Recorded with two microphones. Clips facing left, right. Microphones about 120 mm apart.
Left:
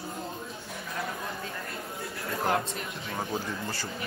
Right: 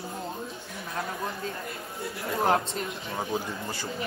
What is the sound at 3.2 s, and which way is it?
Speech, 10° right (ahead or behind).